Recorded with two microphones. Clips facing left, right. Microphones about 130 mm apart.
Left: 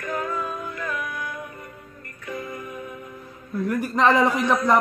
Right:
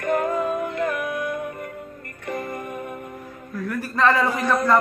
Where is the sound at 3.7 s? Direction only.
15° left (ahead or behind).